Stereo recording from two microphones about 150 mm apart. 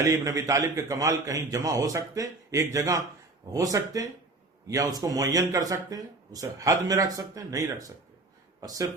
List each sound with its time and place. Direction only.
0.1 s speech: 20° right (ahead or behind)